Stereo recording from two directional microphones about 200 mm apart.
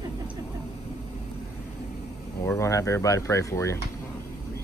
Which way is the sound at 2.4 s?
15° left (ahead or behind).